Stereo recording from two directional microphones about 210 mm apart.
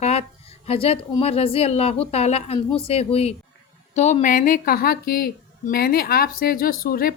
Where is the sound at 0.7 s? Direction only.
25° left (ahead or behind).